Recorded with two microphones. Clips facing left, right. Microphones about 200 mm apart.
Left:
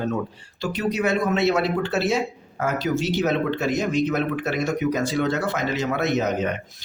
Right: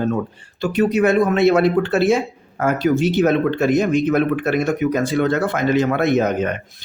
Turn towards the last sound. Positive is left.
turn(degrees=-55)  # may be behind; listen again after turning